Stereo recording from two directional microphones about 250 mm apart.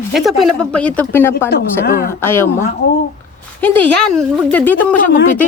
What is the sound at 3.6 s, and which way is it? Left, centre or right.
A woman's voice, centre.